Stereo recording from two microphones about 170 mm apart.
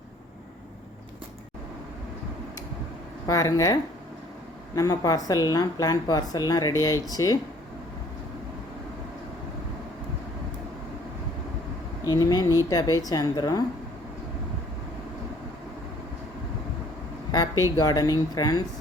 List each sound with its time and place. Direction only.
3.2 s speech: 20° left (ahead or behind)
12.0 s speech: 20° left (ahead or behind)
17.6 s speech: 20° left (ahead or behind)